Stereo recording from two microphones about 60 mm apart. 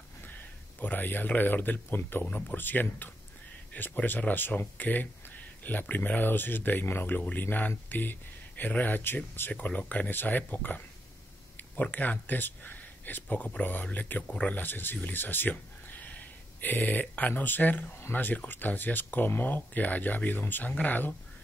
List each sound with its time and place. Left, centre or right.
0.3 s speech: left
2.2 s speech: left
9.5 s speech: left